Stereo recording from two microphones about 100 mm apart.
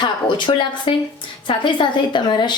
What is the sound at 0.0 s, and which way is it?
A woman's voice, 50° left (ahead or behind).